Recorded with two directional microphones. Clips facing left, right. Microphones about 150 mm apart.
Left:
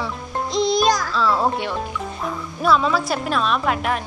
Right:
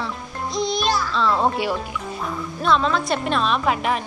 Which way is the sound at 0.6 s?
35° left (ahead or behind).